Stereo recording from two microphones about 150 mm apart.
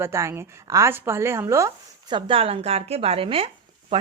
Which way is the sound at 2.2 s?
35° right (ahead or behind).